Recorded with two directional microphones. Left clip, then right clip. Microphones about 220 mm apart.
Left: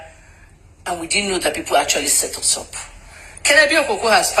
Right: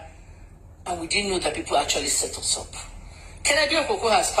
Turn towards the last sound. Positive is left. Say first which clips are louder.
# left 5 dB
turn(degrees=25)  # may be behind; listen again after turning